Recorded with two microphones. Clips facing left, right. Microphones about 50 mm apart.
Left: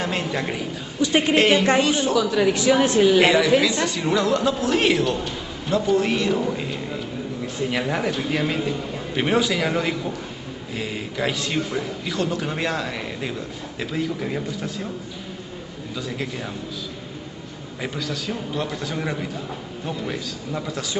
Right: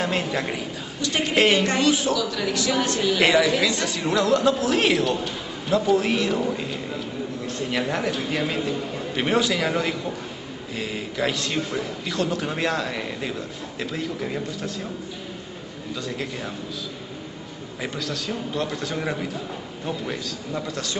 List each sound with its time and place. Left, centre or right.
0.0 s a man's voice: centre
1.0 s speech: centre
1.3 s a man's voice: centre
2.1 s speech: left
3.2 s a man's voice: centre
16.0 s a man's voice: centre
17.8 s a man's voice: centre